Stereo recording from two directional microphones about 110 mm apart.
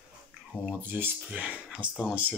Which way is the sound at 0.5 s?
15° right (ahead or behind).